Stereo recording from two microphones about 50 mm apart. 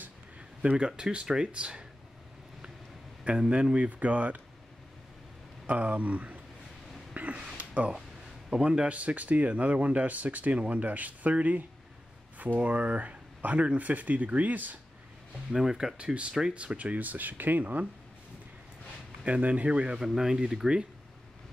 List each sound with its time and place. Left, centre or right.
0.6 s speech: centre
3.3 s speech: right
5.7 s speech: right
7.2 s a sound: right
8.5 s speech: centre
8.8 s speech: right
15.5 s speech: centre; by 17.8 s right
19.2 s speech: right